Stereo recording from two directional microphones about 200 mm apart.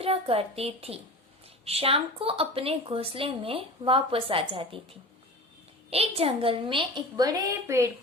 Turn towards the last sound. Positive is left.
turn(degrees=-15)  # may be behind; listen again after turning